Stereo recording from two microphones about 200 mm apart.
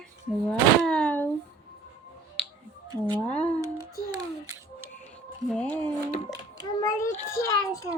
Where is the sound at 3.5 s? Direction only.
15° right (ahead or behind).